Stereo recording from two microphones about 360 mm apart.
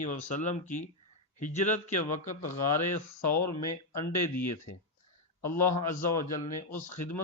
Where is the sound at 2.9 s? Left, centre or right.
Left.